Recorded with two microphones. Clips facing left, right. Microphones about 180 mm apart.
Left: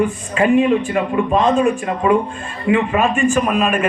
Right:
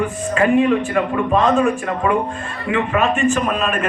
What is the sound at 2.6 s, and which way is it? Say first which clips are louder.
Speech: left 3 dB; 30° left (ahead or behind).